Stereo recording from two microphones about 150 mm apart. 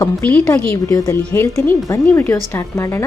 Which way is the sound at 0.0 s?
10° left (ahead or behind).